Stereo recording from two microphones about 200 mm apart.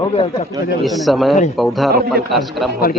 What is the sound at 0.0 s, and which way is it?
Speech, 30° left (ahead or behind).